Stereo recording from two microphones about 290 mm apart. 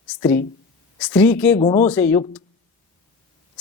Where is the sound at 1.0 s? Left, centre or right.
Centre.